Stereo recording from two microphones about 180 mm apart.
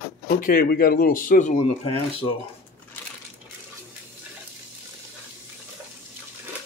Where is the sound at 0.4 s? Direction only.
50° left (ahead or behind).